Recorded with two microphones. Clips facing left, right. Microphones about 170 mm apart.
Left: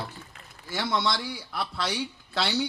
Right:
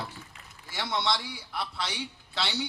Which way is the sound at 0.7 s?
55° left (ahead or behind).